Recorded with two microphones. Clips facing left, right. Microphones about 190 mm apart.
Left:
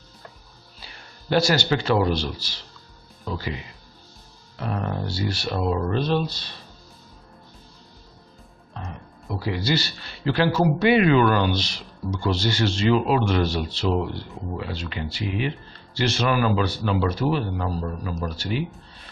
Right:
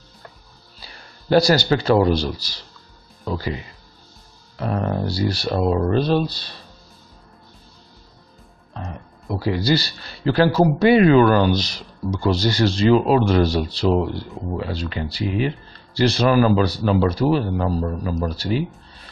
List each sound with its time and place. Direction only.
1.3 s a man's voice: 35° right (ahead or behind)
4.6 s a man's voice: 40° right (ahead or behind)
9.4 s a man's voice: 35° right (ahead or behind)